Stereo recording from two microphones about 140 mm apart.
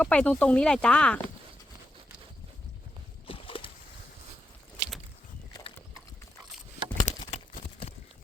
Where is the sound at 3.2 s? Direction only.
40° left (ahead or behind).